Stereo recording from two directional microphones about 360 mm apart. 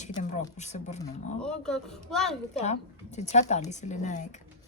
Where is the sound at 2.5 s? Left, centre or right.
Centre.